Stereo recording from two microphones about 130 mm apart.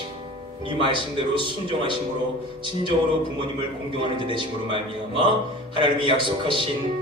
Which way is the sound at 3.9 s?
40° right (ahead or behind).